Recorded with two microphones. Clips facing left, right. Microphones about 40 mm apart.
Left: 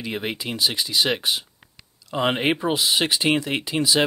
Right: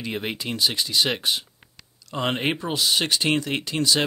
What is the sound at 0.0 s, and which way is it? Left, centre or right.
Speech, centre.